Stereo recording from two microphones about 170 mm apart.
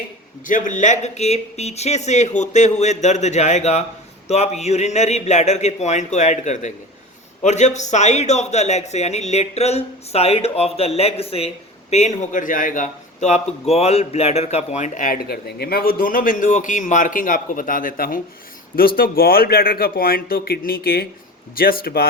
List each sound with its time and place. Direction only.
0.4 s a man's voice: 50° left (ahead or behind)